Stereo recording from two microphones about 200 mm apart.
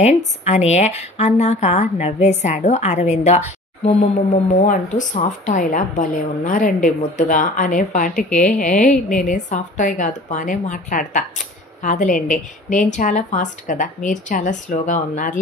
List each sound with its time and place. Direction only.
0.0 s a woman's voice: 35° left (ahead or behind)